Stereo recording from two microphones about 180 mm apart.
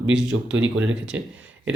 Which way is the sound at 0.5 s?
90° right.